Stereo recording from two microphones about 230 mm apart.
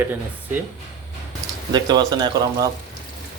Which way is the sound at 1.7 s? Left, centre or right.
Centre.